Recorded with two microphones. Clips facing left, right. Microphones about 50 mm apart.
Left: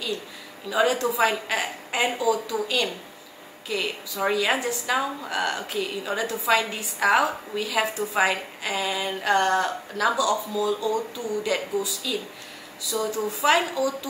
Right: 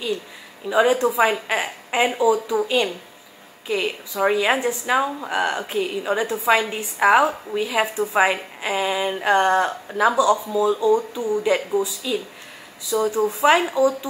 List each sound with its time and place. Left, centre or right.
0.7 s a woman's voice: right